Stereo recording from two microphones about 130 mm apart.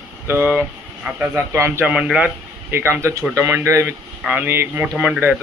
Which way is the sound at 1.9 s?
5° right (ahead or behind).